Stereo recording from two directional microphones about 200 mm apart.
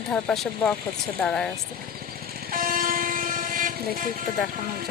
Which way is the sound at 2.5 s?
45° right (ahead or behind).